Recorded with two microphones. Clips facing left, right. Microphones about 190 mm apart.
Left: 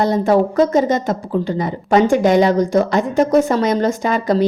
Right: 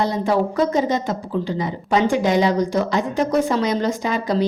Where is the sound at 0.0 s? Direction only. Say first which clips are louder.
Left 5 dB; 50° left (ahead or behind).